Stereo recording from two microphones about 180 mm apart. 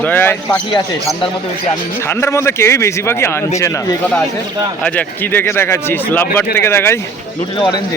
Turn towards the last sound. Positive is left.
turn(degrees=25)  # may be behind; listen again after turning